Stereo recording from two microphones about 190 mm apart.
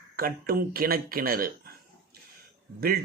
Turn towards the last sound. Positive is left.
turn(degrees=-55)  # may be behind; listen again after turning